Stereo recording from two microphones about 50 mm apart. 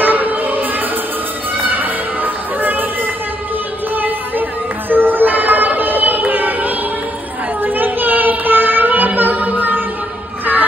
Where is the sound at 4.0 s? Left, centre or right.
Right.